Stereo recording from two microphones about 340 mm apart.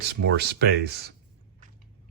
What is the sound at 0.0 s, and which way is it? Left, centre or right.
Speech, right.